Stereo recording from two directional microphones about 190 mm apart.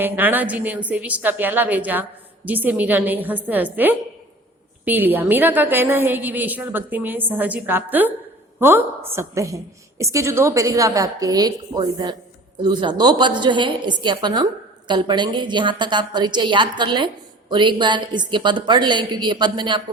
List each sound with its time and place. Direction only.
0.0 s a woman's voice: 10° right (ahead or behind)